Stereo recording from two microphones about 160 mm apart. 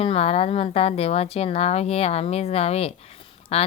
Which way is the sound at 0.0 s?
40° left (ahead or behind).